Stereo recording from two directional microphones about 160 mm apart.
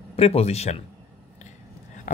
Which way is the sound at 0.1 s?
40° left (ahead or behind).